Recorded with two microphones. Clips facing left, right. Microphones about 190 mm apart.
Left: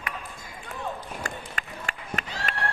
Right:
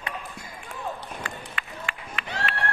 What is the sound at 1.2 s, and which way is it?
Run, 45° left (ahead or behind).